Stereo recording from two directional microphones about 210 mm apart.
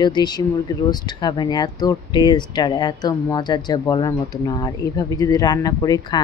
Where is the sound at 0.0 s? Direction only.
20° left (ahead or behind).